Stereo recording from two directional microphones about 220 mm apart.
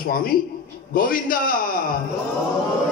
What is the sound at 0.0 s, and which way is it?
A man's voice, 40° left (ahead or behind).